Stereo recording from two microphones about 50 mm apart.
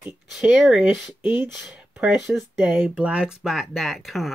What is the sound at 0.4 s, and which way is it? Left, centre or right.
Speech, centre.